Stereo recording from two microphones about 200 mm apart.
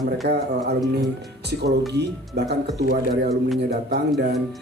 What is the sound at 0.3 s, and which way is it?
Speech, 55° right (ahead or behind).